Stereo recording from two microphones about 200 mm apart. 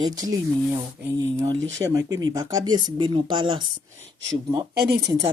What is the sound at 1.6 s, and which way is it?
Speech, 65° right (ahead or behind).